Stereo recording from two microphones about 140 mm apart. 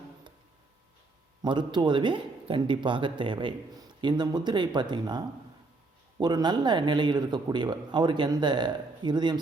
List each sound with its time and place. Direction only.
1.4 s speech: 30° right (ahead or behind)